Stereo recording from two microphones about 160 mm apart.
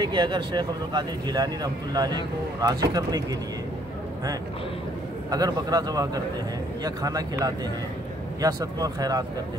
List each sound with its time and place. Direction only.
0.0 s speech: 25° right (ahead or behind)
5.3 s speech: 25° right (ahead or behind)